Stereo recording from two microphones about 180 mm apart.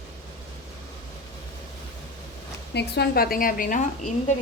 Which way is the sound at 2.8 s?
65° left (ahead or behind).